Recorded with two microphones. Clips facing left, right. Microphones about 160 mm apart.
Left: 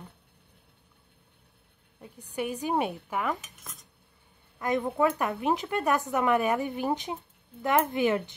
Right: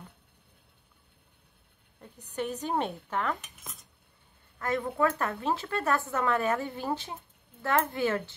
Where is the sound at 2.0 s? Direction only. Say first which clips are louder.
Left 1 dB; 10° left (ahead or behind).